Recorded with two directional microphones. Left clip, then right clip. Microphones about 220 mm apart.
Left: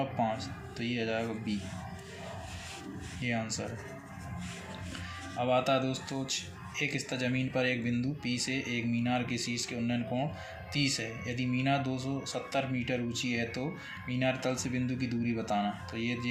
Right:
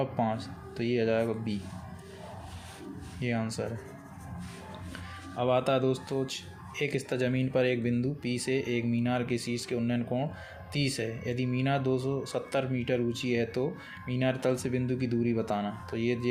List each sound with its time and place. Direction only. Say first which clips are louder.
0.0 s speech: right 1 dB; 50° right (ahead or behind)
3.2 s speech: right 2 dB; 50° right (ahead or behind)
5.4 s speech: right 2 dB; 50° right (ahead or behind)